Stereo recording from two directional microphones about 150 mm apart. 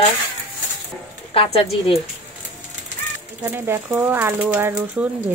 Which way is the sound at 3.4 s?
15° right (ahead or behind).